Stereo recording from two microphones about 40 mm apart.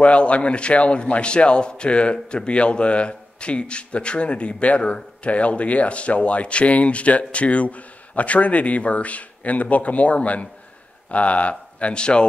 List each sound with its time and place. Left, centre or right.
0.0 s a man's voice: left